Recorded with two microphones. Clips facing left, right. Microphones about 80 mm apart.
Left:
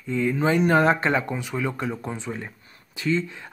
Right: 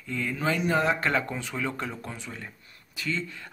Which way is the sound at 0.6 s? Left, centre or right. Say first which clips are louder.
Left 6 dB; left.